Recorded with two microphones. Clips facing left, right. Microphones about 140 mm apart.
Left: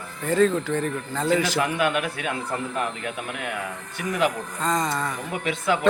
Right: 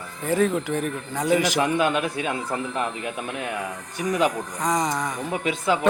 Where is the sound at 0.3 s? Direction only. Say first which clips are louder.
Left 1 dB; 15° right (ahead or behind).